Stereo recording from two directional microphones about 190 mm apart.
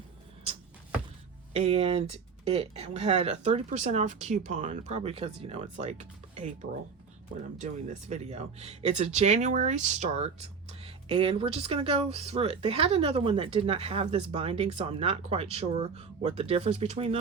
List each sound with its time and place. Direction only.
1.5 s speech: 30° right (ahead or behind)
7.6 s speech: 35° right (ahead or behind)